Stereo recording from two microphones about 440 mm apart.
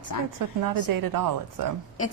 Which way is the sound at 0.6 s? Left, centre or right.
Right.